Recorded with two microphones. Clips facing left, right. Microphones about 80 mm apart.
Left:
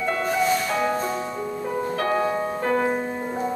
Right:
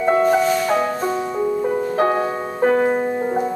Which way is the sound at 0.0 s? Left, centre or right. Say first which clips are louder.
Right 7 dB; right.